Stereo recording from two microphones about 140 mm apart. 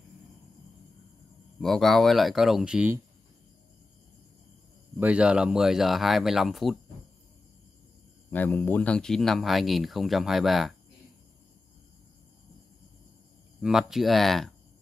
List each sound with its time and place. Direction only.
1.6 s speech: centre (ahead or behind)
4.9 s speech: 5° right (ahead or behind)
8.3 s speech: 15° left (ahead or behind)
13.6 s speech: 5° right (ahead or behind)